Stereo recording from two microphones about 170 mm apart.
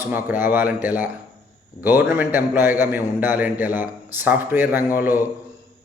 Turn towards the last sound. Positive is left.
turn(degrees=-10)  # may be behind; listen again after turning